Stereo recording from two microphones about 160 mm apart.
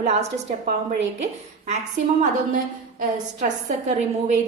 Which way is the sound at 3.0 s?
50° right (ahead or behind).